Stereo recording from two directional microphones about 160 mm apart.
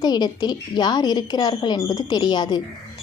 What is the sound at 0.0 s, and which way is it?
A woman's voice, 25° left (ahead or behind).